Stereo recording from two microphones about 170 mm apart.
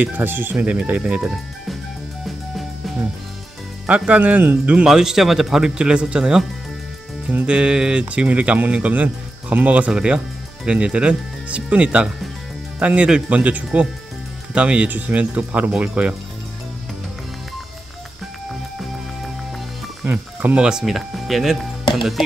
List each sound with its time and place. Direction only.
0.0 s speech: 10° right (ahead or behind)
3.8 s speech: 5° right (ahead or behind)
20.0 s speech: 10° right (ahead or behind)